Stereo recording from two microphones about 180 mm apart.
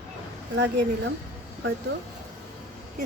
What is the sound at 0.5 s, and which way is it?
Speech, 90° right.